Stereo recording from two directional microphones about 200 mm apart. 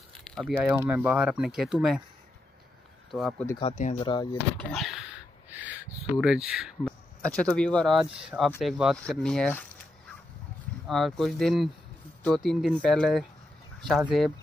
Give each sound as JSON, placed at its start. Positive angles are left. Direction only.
{"t": 0.2, "sound": "a sound", "side_deg": 0}
{"t": 0.6, "sound": "speech", "side_deg": -10}
{"t": 3.1, "sound": "speech", "side_deg": 0}
{"t": 3.6, "sound": "speech", "side_deg": 35}
{"t": 4.0, "sound": "speech", "side_deg": 20}
{"t": 4.6, "sound": "dog", "side_deg": 0}
{"t": 6.2, "sound": "speech", "side_deg": -5}
{"t": 10.9, "sound": "speech", "side_deg": 0}